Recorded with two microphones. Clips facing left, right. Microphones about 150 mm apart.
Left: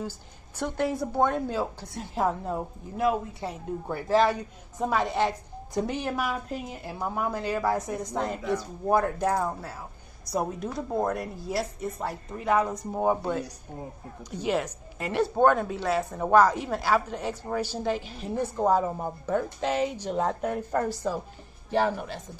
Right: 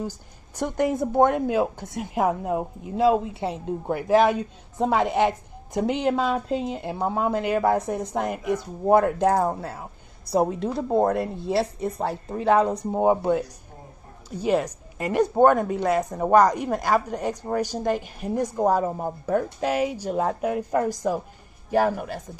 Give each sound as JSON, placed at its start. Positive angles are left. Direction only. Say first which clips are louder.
{"t": 0.6, "sound": "a woman's voice", "louder": "right 4 dB", "side_deg": -15}
{"t": 3.0, "sound": "a woman's voice", "louder": "right 6 dB", "side_deg": -25}
{"t": 9.3, "sound": "speech", "louder": "right 5 dB", "side_deg": -40}
{"t": 9.7, "sound": "a woman's voice", "louder": "right 4 dB", "side_deg": -25}
{"t": 12.9, "sound": "a woman's voice", "louder": "right 5 dB", "side_deg": -20}
{"t": 14.5, "sound": "a woman's voice", "louder": "right 5 dB", "side_deg": -10}
{"t": 15.4, "sound": "speech", "louder": "right 4 dB", "side_deg": -50}
{"t": 16.0, "sound": "a woman's voice", "louder": "right 2 dB", "side_deg": -15}
{"t": 16.4, "sound": "speech", "louder": "right 3 dB", "side_deg": -45}
{"t": 16.7, "sound": "a woman's voice", "louder": "right 3 dB", "side_deg": -15}